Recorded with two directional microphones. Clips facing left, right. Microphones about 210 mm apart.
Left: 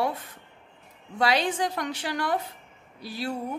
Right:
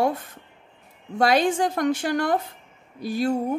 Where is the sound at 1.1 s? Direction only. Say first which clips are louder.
Right 5 dB; 45° right (ahead or behind).